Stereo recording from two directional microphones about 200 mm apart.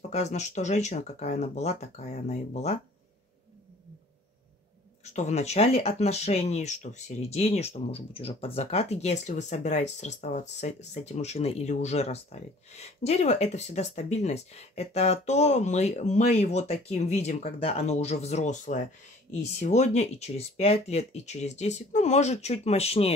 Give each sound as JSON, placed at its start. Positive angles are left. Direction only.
{"t": 0.1, "sound": "speech", "side_deg": 35}
{"t": 5.0, "sound": "speech", "side_deg": 35}